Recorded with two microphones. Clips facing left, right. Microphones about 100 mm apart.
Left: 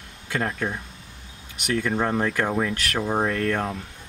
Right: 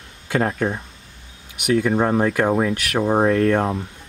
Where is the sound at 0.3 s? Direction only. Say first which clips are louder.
Right 6 dB; 30° right (ahead or behind).